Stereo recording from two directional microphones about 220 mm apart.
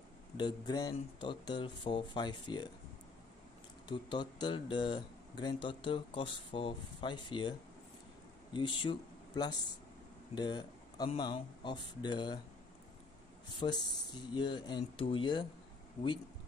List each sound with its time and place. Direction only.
0.4 s speech: 20° left (ahead or behind)
3.9 s speech: 20° left (ahead or behind)
8.5 s speech: 20° left (ahead or behind)
13.5 s speech: 20° left (ahead or behind)